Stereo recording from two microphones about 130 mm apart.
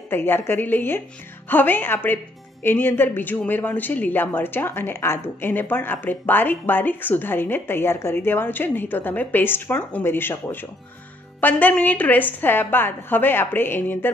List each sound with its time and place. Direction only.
0.1 s speech: 15° left (ahead or behind)